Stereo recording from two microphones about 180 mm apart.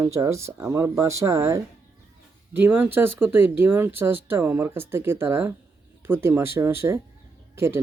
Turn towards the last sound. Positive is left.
turn(degrees=-15)  # may be behind; listen again after turning